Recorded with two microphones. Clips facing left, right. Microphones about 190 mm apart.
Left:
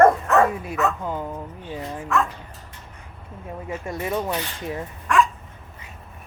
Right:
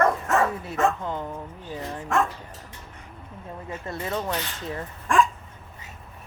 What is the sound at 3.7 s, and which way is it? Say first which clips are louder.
Speech: left 4 dB; 15° left (ahead or behind).